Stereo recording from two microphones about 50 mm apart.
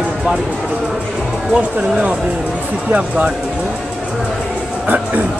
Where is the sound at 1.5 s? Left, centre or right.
Right.